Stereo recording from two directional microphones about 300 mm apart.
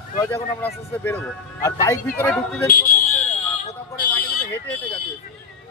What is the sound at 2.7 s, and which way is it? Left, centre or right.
Speech, left.